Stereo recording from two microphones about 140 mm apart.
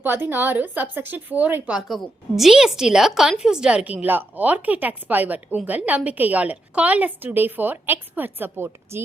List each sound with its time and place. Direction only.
0.0 s a woman's voice: 15° right (ahead or behind)
1.9 s a woman's voice: centre (ahead or behind); by 9.0 s 15° right (ahead or behind)